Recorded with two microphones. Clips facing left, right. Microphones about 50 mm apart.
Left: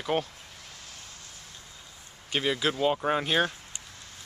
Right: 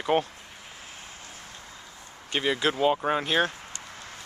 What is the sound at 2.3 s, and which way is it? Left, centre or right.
Speech, centre.